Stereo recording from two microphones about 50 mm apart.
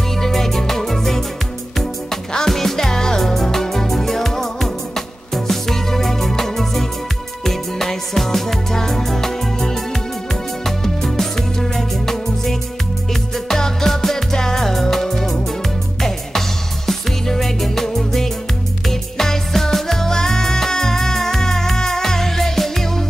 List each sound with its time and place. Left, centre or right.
0.2 s music: centre
2.3 s music: centre